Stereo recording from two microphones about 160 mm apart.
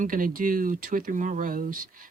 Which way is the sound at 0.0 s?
60° right (ahead or behind).